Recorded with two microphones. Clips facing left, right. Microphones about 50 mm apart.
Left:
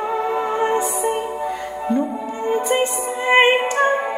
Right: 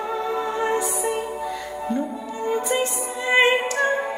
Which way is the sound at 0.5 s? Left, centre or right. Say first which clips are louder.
Left 4 dB; left.